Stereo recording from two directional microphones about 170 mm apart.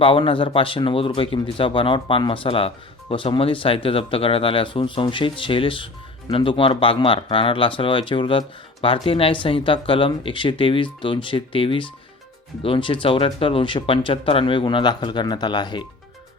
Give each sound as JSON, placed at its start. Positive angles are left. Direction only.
{"t": 0.0, "sound": "speech", "side_deg": 30}